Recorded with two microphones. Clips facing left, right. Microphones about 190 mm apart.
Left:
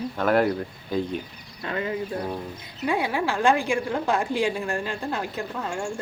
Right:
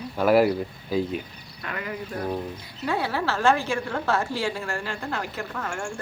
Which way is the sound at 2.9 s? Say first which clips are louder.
Left 1 dB; 15° left (ahead or behind).